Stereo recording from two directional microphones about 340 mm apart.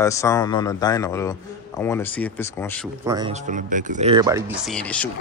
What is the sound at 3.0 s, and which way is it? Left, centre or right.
Speech, centre.